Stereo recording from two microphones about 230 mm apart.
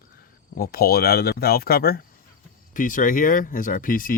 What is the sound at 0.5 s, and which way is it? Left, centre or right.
Speech, left.